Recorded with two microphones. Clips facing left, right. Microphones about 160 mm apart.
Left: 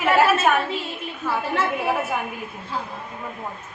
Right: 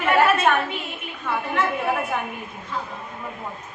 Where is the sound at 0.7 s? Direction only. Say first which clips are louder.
Left 3 dB; 30° left (ahead or behind).